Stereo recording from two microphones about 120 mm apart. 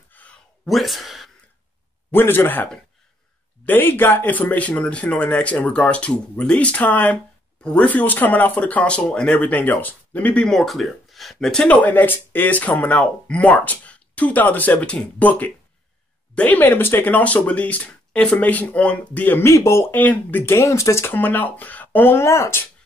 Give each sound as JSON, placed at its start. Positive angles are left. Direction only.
{"t": 0.1, "sound": "a sound", "side_deg": 10}
{"t": 0.7, "sound": "speech", "side_deg": 0}
{"t": 2.0, "sound": "speech", "side_deg": 20}